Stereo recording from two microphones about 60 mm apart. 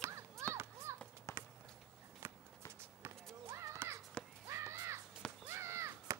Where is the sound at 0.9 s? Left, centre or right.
Right.